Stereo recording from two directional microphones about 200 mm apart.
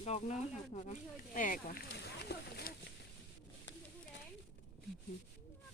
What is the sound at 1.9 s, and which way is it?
Speech, 55° left (ahead or behind).